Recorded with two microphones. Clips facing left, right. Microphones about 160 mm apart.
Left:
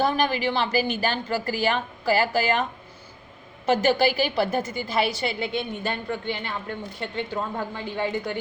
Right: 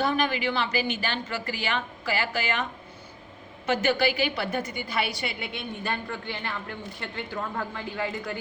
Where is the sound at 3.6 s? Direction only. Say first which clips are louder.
Left 4 dB; 35° left (ahead or behind).